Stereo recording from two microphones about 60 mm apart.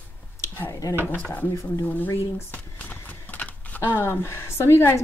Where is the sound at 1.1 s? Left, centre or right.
Left.